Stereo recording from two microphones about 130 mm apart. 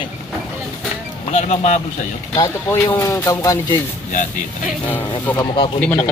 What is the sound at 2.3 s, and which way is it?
Speech, 25° left (ahead or behind).